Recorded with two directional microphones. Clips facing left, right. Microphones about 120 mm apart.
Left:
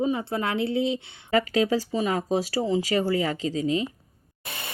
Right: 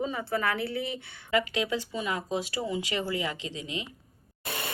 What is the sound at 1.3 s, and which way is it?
Speech, 40° left (ahead or behind).